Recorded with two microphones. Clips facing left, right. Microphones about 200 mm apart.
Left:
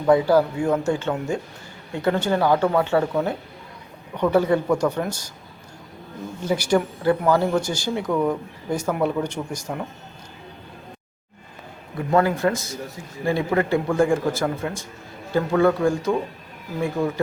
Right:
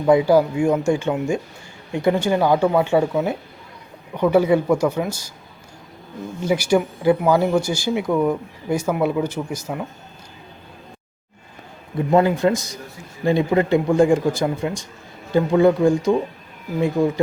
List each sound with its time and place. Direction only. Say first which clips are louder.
0.0 s speech: right 2 dB; 15° right (ahead or behind)
6.4 s speech: right 2 dB; 10° right (ahead or behind)
12.1 s speech: right 3 dB; 20° right (ahead or behind)